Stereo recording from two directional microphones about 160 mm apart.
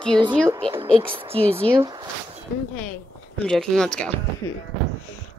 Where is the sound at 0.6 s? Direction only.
35° right (ahead or behind).